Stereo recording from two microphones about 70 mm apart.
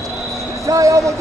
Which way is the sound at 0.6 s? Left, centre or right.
Right.